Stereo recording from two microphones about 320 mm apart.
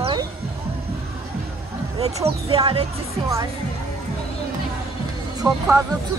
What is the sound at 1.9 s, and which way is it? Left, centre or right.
Speech, centre.